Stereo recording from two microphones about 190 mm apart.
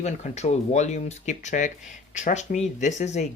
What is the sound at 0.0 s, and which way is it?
Speech, 35° left (ahead or behind).